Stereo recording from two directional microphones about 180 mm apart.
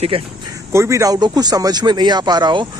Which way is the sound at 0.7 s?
15° right (ahead or behind).